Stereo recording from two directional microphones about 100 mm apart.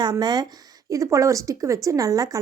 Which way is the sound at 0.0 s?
45° right (ahead or behind).